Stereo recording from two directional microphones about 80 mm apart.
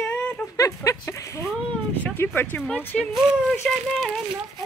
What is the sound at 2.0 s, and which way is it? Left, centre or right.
Speech, left.